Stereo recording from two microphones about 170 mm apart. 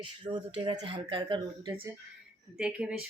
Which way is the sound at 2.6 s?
5° right (ahead or behind).